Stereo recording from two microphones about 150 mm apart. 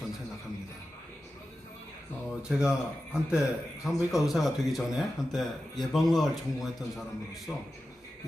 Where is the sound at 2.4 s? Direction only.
5° right (ahead or behind).